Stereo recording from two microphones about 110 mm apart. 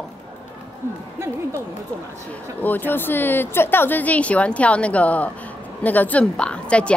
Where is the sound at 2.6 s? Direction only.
15° left (ahead or behind).